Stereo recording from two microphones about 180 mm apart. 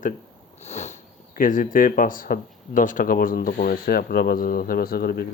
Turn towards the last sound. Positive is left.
turn(degrees=60)  # may be behind; listen again after turning